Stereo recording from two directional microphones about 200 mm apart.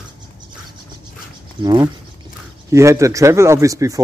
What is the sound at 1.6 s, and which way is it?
Speech, 20° right (ahead or behind).